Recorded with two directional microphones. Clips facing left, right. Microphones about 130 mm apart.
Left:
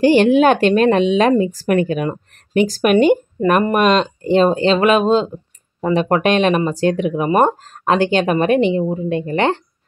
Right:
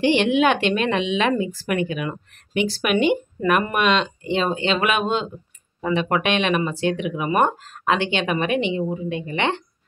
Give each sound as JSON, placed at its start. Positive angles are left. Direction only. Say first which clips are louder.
{"t": 0.0, "sound": "speech", "louder": "left 6 dB", "side_deg": 40}